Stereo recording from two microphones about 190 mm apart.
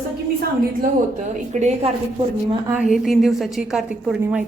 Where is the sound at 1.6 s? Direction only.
35° right (ahead or behind).